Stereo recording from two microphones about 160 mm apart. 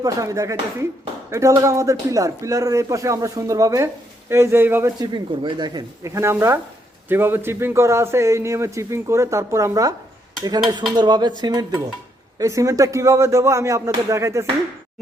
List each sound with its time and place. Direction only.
0.0 s a man's voice: 20° right (ahead or behind)
5.1 s a man's voice: 30° right (ahead or behind)